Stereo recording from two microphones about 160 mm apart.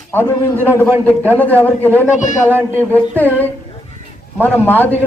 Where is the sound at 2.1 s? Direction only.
50° left (ahead or behind).